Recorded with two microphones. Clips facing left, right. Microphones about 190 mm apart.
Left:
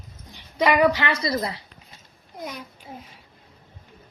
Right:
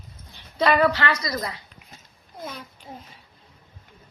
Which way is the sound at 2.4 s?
15° left (ahead or behind).